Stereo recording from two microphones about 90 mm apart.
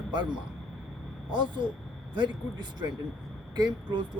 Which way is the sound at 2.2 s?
55° right (ahead or behind).